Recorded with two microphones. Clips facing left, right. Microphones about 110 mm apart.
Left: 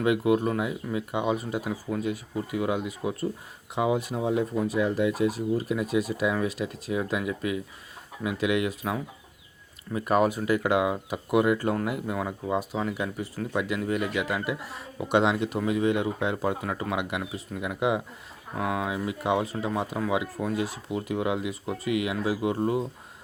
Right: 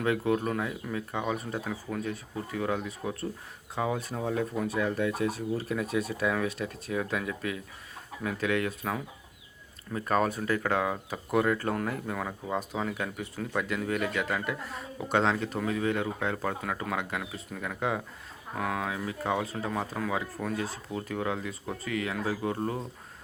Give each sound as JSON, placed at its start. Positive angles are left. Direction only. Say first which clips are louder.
{"t": 0.0, "sound": "speech", "louder": "left 4 dB", "side_deg": 10}